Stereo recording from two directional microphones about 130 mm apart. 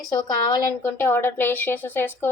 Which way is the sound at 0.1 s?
30° left (ahead or behind).